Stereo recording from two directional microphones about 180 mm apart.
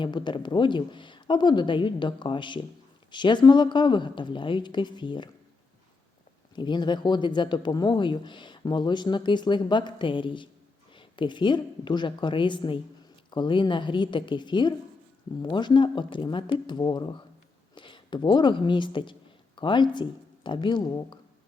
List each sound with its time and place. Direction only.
0.0 s speech: 25° left (ahead or behind)
6.6 s speech: 25° left (ahead or behind)